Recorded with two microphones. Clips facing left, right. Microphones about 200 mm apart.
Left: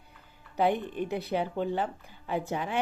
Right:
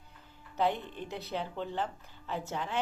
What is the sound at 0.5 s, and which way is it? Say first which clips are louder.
A woman's voice: left 4 dB; 15° left (ahead or behind).